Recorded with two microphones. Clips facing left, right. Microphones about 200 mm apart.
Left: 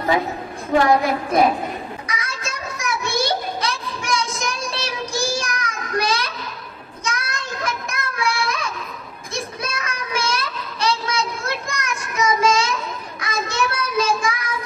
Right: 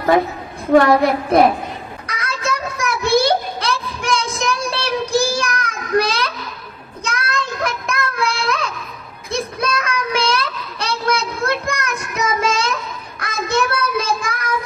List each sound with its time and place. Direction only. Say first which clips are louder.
0.7 s a woman's voice: right 4 dB; 60° right (ahead or behind)
2.0 s child singing: right 6 dB; 60° right (ahead or behind)